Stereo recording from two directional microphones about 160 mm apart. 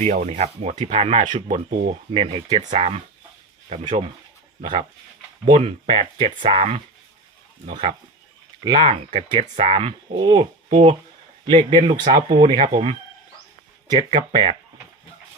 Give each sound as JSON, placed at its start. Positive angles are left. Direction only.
{"t": 0.0, "sound": "speech", "side_deg": -45}
{"t": 4.6, "sound": "speech", "side_deg": -30}
{"t": 5.5, "sound": "speech", "side_deg": -40}
{"t": 11.9, "sound": "speech", "side_deg": -30}